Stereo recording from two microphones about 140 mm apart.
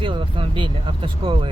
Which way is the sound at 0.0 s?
35° right (ahead or behind).